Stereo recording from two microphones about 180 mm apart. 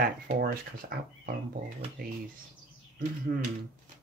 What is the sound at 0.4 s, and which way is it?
Speech, 55° right (ahead or behind).